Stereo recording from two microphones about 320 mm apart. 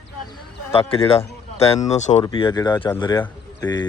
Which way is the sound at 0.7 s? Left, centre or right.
Centre.